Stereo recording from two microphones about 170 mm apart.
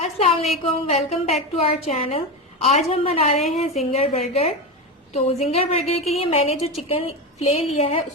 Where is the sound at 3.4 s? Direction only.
Centre (ahead or behind).